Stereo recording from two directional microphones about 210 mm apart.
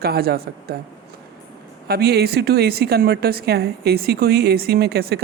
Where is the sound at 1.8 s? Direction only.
50° right (ahead or behind).